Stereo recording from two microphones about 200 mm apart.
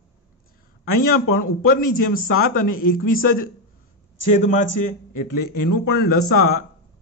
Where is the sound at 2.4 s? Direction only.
50° left (ahead or behind).